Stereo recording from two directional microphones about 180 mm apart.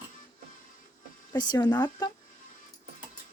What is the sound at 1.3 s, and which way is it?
Speech, 25° left (ahead or behind).